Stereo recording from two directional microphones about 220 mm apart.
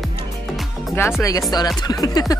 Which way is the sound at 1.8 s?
15° left (ahead or behind).